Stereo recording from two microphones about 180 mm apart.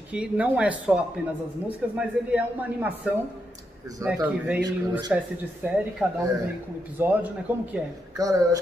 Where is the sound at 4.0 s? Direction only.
10° right (ahead or behind).